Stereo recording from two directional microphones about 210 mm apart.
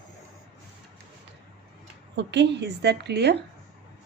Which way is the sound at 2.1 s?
55° right (ahead or behind).